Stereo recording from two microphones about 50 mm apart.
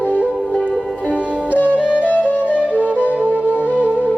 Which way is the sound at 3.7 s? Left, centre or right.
Right.